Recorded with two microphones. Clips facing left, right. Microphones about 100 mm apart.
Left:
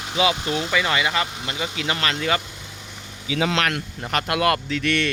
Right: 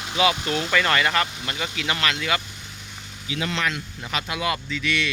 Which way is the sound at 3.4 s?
80° left.